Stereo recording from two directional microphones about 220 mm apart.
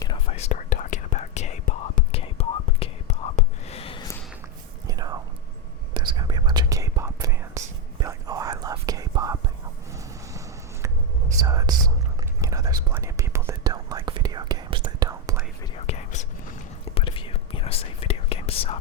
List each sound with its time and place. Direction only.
0.0 s whispering: 25° left (ahead or behind)
4.9 s whispering: 20° right (ahead or behind)
11.3 s whispering: 15° right (ahead or behind)
15.7 s whispering: 30° left (ahead or behind)